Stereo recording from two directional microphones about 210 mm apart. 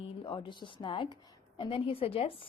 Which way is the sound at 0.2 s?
25° left (ahead or behind).